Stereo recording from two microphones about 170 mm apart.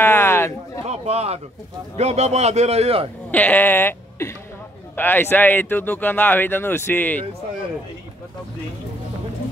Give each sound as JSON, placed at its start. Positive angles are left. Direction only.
{"t": 0.0, "sound": "a sound", "side_deg": 15}
{"t": 0.8, "sound": "a man's voice", "side_deg": -40}
{"t": 3.3, "sound": "speech", "side_deg": 10}